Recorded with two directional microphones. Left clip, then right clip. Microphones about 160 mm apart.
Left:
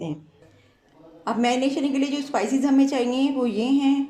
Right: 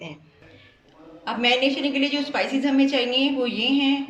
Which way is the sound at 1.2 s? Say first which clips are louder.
Right 2 dB; 50° left (ahead or behind).